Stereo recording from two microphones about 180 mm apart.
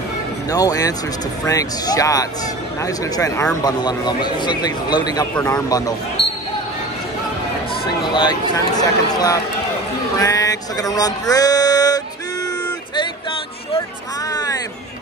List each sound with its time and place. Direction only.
0.5 s a man's voice: 20° left (ahead or behind)
5.3 s speech: 5° left (ahead or behind)
5.7 s a man's voice: 20° left (ahead or behind)
8.1 s a man's voice: 25° left (ahead or behind)
10.1 s music: 20° left (ahead or behind)
14.3 s a sound: 20° left (ahead or behind)